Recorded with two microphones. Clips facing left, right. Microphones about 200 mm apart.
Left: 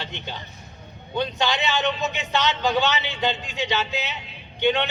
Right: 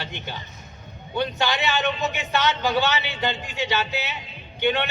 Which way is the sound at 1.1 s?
20° left (ahead or behind).